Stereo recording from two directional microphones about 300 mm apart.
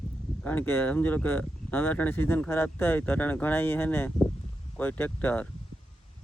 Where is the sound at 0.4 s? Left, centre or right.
Centre.